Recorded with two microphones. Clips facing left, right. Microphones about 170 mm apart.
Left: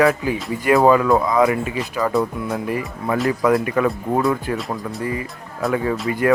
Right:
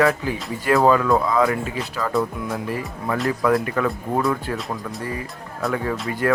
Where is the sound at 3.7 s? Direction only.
15° left (ahead or behind).